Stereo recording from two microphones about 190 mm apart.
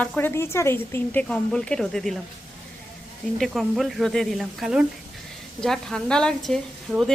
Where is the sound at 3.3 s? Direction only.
Centre (ahead or behind).